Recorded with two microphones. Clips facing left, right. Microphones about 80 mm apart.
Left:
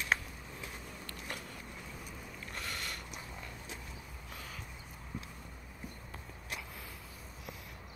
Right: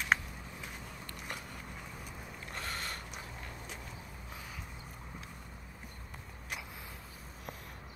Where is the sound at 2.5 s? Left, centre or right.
Right.